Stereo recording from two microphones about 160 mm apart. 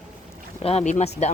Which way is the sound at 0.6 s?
40° left (ahead or behind).